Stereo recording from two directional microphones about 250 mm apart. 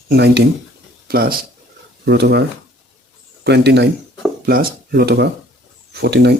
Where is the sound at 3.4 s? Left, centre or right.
Right.